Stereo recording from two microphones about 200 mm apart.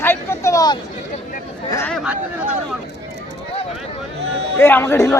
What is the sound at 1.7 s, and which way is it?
Speech, 10° left (ahead or behind).